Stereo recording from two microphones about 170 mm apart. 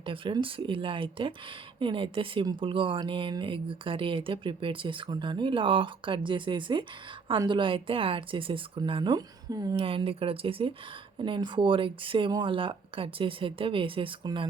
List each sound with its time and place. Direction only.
0.0 s speech: 30° right (ahead or behind)
9.8 s speech: 30° right (ahead or behind)